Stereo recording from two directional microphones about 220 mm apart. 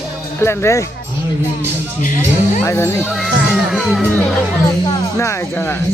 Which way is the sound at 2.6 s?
10° left (ahead or behind).